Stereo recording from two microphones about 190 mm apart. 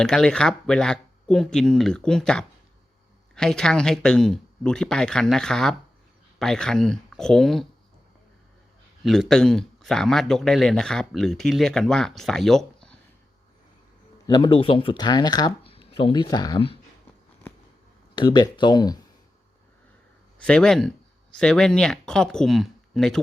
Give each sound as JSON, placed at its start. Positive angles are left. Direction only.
{"t": 0.0, "sound": "speech", "side_deg": 5}
{"t": 9.0, "sound": "speech", "side_deg": 5}
{"t": 14.3, "sound": "speech", "side_deg": 25}
{"t": 18.1, "sound": "speech", "side_deg": 25}
{"t": 20.4, "sound": "speech", "side_deg": 5}